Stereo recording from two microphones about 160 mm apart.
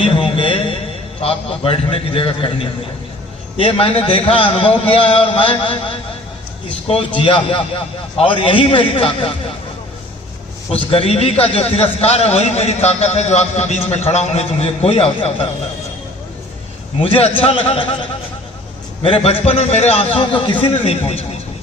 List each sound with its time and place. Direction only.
0.1 s a sound: 30° left (ahead or behind)
1.2 s a man's voice: 35° left (ahead or behind)
6.8 s a man's voice: 35° left (ahead or behind)
10.9 s a man's voice: 40° left (ahead or behind)
17.0 s a man's voice: 35° left (ahead or behind)
19.0 s a man's voice: 35° left (ahead or behind)